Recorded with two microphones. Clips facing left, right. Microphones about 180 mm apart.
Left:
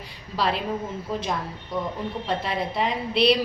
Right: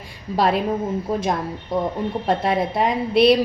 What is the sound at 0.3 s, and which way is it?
Speech, 50° right (ahead or behind).